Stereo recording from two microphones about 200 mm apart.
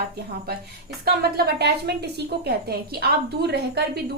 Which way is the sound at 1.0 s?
50° right (ahead or behind).